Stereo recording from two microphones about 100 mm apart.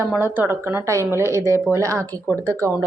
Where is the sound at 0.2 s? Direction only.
20° right (ahead or behind).